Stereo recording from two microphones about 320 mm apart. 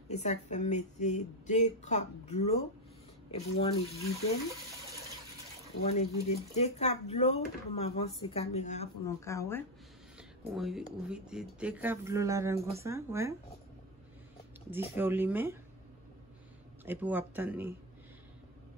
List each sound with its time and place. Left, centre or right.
0.1 s speech: left
5.9 s speech: centre
9.0 s speech: centre
15.0 s speech: centre
16.8 s speech: centre